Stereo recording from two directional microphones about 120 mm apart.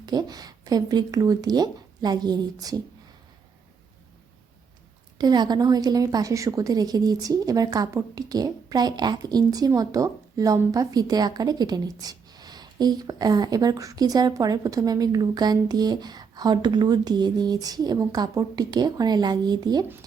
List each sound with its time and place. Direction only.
0.0 s speech: 35° right (ahead or behind)
5.1 s speech: 35° right (ahead or behind)